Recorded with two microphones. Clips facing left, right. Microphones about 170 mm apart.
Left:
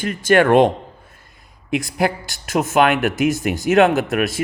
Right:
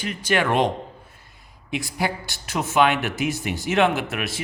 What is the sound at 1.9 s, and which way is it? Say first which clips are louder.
Speech: left 5 dB; 50° left (ahead or behind).